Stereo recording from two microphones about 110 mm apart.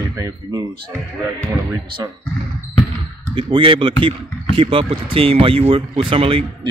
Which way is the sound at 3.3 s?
50° right (ahead or behind).